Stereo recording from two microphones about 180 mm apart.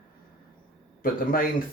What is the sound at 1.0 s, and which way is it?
Speech, 55° left (ahead or behind).